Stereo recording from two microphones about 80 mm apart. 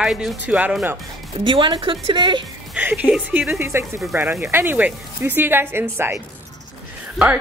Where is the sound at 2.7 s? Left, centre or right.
Centre.